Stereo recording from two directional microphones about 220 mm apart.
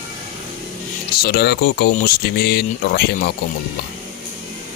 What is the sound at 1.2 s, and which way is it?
Speech, 45° left (ahead or behind).